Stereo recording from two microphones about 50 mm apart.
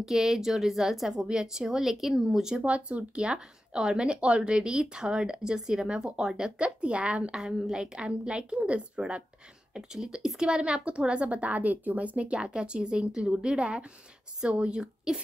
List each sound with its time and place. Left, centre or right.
0.0 s speech: centre
2.6 s a woman's voice: right